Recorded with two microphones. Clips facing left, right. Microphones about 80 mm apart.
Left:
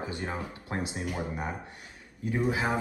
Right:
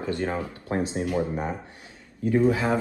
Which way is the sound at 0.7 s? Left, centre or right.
Right.